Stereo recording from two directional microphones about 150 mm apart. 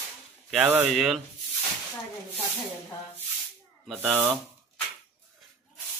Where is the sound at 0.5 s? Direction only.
15° right (ahead or behind).